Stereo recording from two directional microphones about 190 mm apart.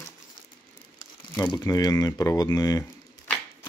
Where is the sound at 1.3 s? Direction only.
20° left (ahead or behind).